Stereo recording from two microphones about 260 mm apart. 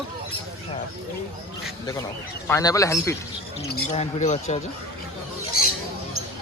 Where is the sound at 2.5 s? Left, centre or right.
Centre.